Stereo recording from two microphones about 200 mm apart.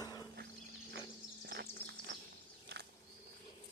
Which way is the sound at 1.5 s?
55° right (ahead or behind).